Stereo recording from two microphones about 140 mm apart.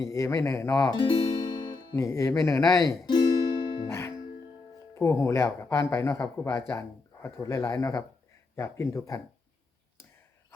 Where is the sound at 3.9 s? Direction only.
20° left (ahead or behind).